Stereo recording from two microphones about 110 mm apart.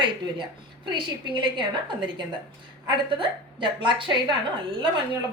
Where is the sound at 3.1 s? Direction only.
50° right (ahead or behind).